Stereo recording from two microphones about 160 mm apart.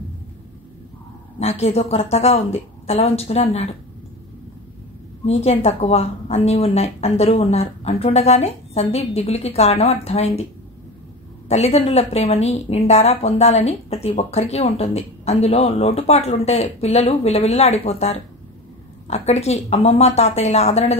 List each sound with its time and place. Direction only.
1.4 s speech: 40° left (ahead or behind)
5.2 s speech: 40° left (ahead or behind)
11.4 s a woman's voice: 40° left (ahead or behind)